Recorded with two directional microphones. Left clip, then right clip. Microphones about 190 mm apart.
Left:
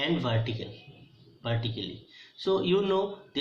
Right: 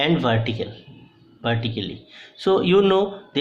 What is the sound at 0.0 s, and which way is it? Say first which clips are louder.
Speech: right 9 dB; 45° right (ahead or behind).